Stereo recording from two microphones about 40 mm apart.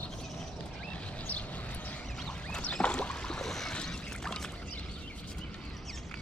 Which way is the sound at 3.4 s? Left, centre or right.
Centre.